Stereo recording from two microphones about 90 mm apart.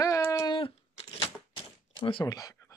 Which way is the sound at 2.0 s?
65° left (ahead or behind).